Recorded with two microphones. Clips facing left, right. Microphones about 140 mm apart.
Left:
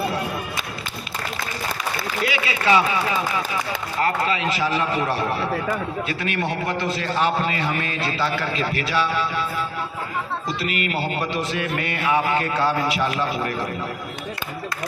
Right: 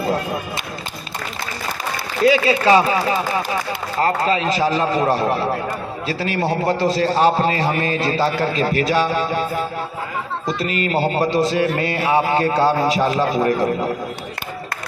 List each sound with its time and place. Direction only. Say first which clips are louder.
2.2 s a man's voice: right 9 dB; 35° right (ahead or behind)